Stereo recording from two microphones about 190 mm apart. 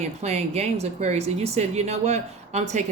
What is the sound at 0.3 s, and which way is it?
A woman's voice, 35° right (ahead or behind).